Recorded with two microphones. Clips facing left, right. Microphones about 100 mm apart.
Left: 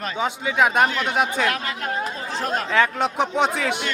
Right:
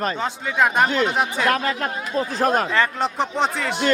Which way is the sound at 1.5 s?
40° right (ahead or behind).